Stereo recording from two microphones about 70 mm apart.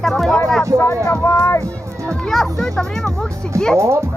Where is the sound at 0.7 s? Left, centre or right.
Left.